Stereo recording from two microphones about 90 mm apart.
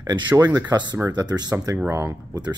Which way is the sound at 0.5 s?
50° right (ahead or behind).